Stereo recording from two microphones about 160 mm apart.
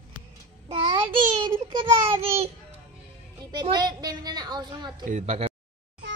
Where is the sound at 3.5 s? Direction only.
25° right (ahead or behind).